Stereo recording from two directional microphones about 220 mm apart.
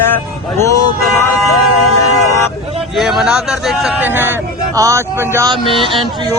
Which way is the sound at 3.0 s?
Centre (ahead or behind).